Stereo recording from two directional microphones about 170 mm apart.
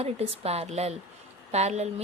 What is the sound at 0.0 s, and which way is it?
Speech, 40° right (ahead or behind).